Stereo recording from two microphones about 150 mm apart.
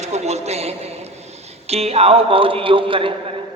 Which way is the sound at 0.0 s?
45° right (ahead or behind).